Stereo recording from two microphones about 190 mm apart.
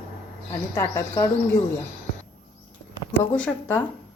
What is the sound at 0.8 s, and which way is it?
Speech, 15° left (ahead or behind).